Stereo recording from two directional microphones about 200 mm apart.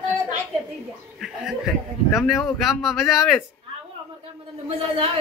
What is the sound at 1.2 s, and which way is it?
Chuckle, centre (ahead or behind).